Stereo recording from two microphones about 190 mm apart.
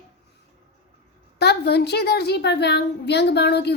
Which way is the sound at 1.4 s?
60° left (ahead or behind).